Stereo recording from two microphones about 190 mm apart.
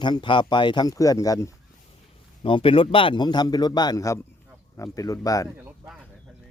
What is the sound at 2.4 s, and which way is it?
Speech, 30° left (ahead or behind).